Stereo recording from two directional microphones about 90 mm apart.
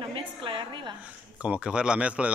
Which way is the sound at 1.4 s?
15° right (ahead or behind).